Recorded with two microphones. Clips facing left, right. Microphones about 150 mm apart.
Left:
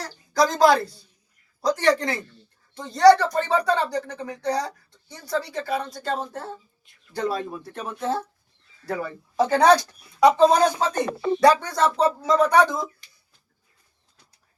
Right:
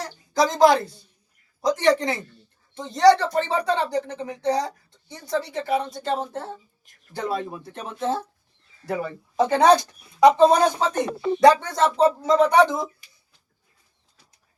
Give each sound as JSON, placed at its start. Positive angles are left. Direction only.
{"t": 0.0, "sound": "speech", "side_deg": -20}